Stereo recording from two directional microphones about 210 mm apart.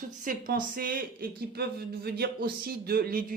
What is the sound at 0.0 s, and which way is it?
Speech, 40° right (ahead or behind).